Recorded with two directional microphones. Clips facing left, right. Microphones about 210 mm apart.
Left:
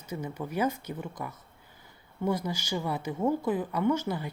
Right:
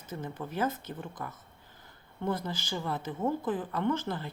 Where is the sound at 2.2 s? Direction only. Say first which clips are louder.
Left 3 dB; 10° left (ahead or behind).